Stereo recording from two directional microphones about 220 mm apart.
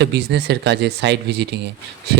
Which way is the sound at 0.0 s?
50° right (ahead or behind).